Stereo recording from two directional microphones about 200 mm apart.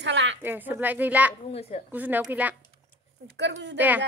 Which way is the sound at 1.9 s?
10° right (ahead or behind).